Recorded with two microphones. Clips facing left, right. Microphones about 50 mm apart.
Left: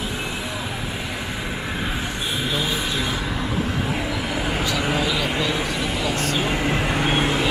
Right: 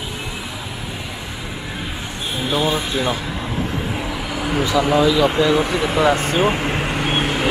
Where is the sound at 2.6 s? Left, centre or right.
Centre.